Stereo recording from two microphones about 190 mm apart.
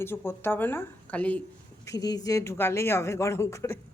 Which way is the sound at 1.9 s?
20° left (ahead or behind).